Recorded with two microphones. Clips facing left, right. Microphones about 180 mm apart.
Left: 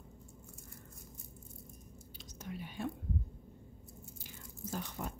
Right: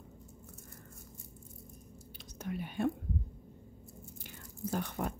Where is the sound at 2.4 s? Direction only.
55° right (ahead or behind).